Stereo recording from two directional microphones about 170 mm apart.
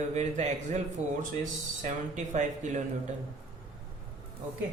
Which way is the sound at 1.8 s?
45° right (ahead or behind).